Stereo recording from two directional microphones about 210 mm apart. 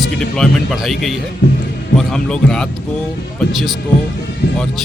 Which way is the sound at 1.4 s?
55° left (ahead or behind).